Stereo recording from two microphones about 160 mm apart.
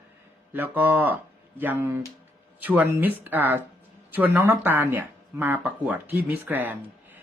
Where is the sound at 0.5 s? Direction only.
10° right (ahead or behind).